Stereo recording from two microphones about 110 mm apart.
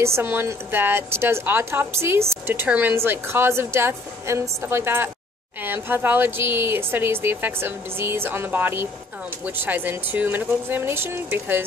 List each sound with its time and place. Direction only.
0.0 s a woman's voice: 20° right (ahead or behind)